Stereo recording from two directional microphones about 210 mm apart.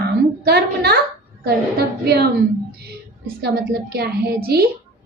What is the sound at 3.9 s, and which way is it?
Speech, 50° right (ahead or behind).